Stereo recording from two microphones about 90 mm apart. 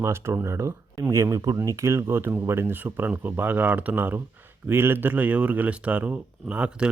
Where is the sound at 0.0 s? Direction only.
30° right (ahead or behind).